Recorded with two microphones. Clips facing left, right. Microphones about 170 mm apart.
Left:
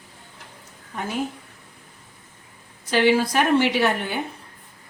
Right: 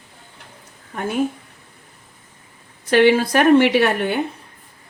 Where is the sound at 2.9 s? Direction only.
60° right (ahead or behind).